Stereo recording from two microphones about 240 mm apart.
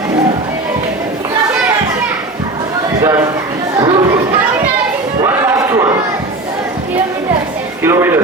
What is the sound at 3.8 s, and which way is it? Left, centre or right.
Chatter, centre.